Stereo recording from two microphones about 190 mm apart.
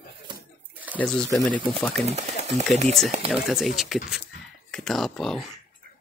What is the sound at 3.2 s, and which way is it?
Speech, centre (ahead or behind).